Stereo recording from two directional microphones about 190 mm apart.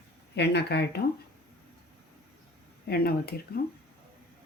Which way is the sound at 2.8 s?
55° left (ahead or behind).